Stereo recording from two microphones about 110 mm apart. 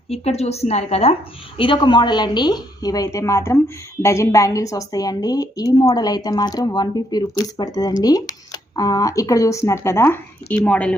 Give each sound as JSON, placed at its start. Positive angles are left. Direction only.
{"t": 0.1, "sound": "a woman's voice", "side_deg": 70}
{"t": 1.5, "sound": "a woman's voice", "side_deg": 45}